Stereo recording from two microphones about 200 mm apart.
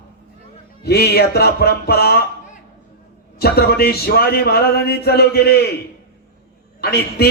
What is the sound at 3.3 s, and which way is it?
A man's voice, 50° left (ahead or behind).